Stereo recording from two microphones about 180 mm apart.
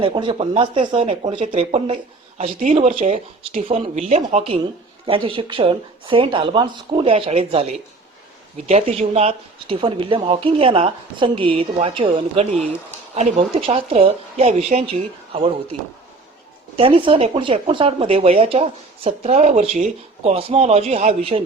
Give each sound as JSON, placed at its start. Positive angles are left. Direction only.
{"t": 0.0, "sound": "speech", "side_deg": -25}
{"t": 16.7, "sound": "speech", "side_deg": -30}